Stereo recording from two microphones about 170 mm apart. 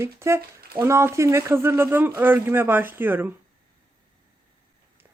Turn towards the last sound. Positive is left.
turn(degrees=-10)  # may be behind; listen again after turning